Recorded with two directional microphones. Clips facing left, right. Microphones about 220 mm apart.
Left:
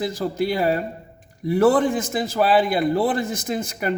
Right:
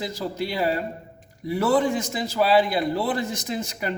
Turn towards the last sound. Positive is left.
turn(degrees=50)  # may be behind; listen again after turning